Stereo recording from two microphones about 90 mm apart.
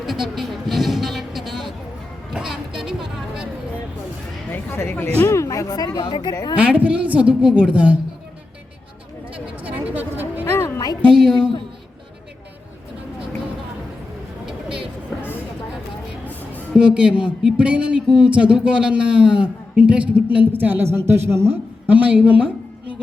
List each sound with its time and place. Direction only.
0.0 s a sound: centre (ahead or behind)
4.5 s a sound: 25° left (ahead or behind)
5.3 s speech: 35° left (ahead or behind)
6.6 s a man's voice: 15° right (ahead or behind)
9.3 s a sound: 15° right (ahead or behind)
10.4 s music: 25° left (ahead or behind)
11.1 s a man's voice: 5° right (ahead or behind)
14.4 s vehicle: 10° right (ahead or behind)
16.7 s a man's voice: 10° right (ahead or behind); by 21.9 s 30° right (ahead or behind)
21.9 s a man's voice: 15° right (ahead or behind)